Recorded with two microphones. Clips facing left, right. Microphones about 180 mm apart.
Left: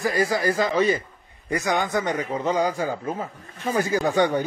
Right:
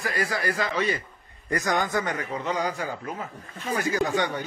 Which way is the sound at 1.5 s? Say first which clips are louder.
Left 2 dB; 10° left (ahead or behind).